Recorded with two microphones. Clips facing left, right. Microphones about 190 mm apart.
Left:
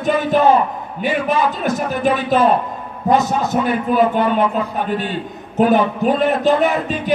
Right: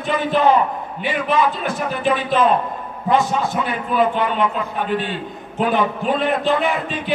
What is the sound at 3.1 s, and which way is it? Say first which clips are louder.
Music: left 2 dB; 40° left (ahead or behind).